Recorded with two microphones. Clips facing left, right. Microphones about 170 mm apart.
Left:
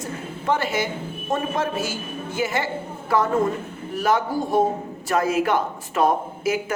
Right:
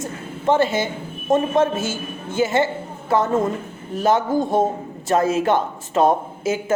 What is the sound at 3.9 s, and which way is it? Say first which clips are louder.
A woman's voice: right 4 dB; 25° right (ahead or behind).